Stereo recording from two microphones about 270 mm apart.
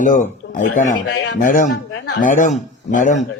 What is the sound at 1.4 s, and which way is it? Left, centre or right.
Speech, left.